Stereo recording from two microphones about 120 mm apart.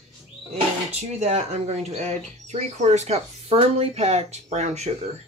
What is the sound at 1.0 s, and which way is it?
Speech, 65° right (ahead or behind).